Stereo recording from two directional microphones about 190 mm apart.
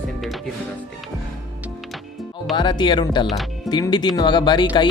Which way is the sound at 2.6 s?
25° left (ahead or behind).